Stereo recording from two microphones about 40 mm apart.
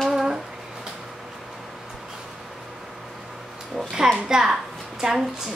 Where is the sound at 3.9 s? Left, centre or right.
Centre.